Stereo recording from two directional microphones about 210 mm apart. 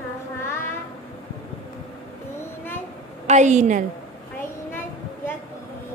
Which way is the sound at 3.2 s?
35° right (ahead or behind).